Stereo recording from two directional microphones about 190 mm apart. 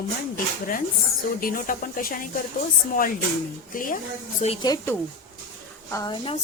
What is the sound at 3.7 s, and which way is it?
Speech, 45° left (ahead or behind).